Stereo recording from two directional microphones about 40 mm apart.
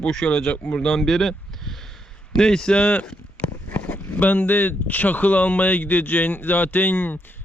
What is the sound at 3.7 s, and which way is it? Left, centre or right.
Speech, left.